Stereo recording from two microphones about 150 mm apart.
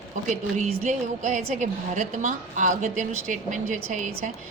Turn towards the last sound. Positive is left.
turn(degrees=-55)  # may be behind; listen again after turning